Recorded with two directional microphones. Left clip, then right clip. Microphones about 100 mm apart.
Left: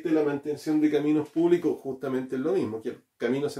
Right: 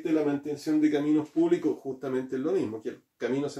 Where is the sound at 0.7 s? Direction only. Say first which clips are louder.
Left 1 dB; 30° left (ahead or behind).